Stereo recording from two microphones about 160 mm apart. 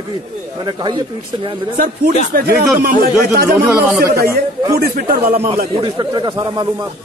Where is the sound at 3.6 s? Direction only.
20° right (ahead or behind).